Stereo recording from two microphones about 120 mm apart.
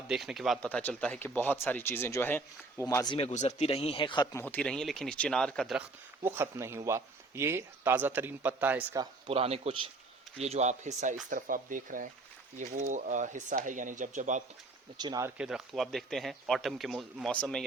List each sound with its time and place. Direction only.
0.1 s speech: 5° right (ahead or behind)
0.6 s speech: 15° left (ahead or behind)
3.2 s speech: 70° left (ahead or behind); by 4.4 s 35° left (ahead or behind)
4.4 s speech: 15° left (ahead or behind)
6.2 s speech: 20° right (ahead or behind)
9.3 s speech: 55° right (ahead or behind)
10.4 s speech: 65° right (ahead or behind); by 14.4 s 90° right
14.9 s speech: 35° right (ahead or behind)
15.4 s speech: 5° right (ahead or behind)